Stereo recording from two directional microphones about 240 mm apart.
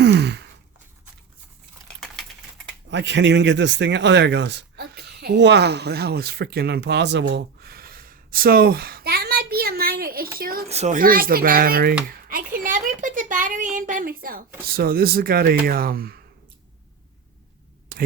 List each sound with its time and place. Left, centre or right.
0.0 s sigh: right
2.9 s a woman's voice: right
17.9 s a sound: right